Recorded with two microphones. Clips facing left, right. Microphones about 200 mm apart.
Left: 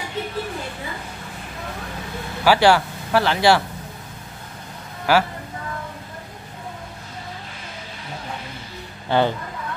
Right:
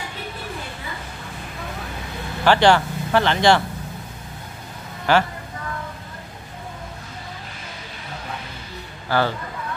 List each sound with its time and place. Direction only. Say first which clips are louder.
2.4 s speech: even; 5° left (ahead or behind)
5.1 s speech: even; 5° left (ahead or behind)
9.1 s speech: left 2 dB; 20° left (ahead or behind)